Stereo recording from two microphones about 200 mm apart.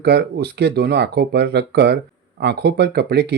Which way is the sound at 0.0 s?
55° right (ahead or behind).